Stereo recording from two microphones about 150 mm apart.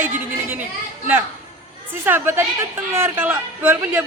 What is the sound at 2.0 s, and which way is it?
A man's voice, 15° right (ahead or behind).